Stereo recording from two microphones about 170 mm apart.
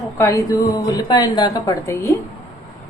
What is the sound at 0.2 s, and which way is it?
A woman's voice, 20° left (ahead or behind).